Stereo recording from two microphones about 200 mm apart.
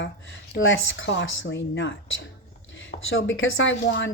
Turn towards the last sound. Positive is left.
turn(degrees=65)  # may be behind; listen again after turning